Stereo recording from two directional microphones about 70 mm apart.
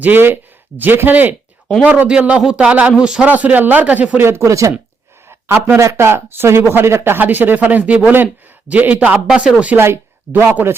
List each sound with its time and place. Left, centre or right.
0.0 s a man's voice: right
4.2 s speech: right
5.3 s a man's voice: right; by 9.7 s centre
9.7 s speech: right